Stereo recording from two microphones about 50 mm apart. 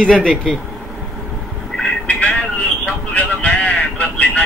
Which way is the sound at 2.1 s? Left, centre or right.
Left.